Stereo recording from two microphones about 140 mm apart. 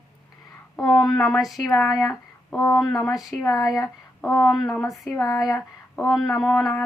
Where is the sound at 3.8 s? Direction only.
20° left (ahead or behind).